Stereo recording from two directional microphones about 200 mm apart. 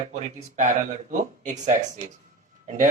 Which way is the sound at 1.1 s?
35° right (ahead or behind).